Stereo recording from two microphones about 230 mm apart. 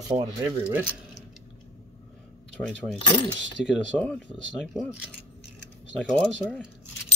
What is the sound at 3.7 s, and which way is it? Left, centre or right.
Speech, centre.